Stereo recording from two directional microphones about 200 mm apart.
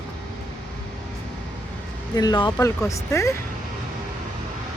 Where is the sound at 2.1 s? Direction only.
20° left (ahead or behind).